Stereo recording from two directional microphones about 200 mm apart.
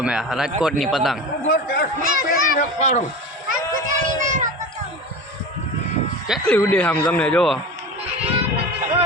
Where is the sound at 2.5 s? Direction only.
40° left (ahead or behind).